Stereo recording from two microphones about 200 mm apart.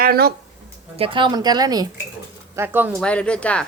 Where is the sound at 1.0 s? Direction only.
25° right (ahead or behind); by 2.9 s 10° right (ahead or behind).